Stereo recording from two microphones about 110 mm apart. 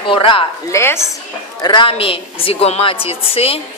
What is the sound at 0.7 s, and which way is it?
Speech, 25° left (ahead or behind).